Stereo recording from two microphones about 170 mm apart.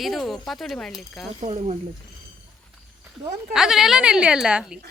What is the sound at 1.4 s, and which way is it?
Speech, 40° right (ahead or behind).